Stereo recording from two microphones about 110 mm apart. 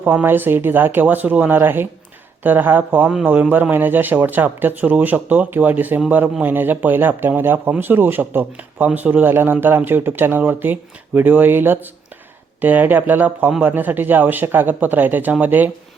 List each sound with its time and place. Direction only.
0.0 s speech: 15° right (ahead or behind)